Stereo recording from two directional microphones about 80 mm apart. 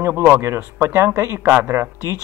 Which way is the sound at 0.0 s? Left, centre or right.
Right.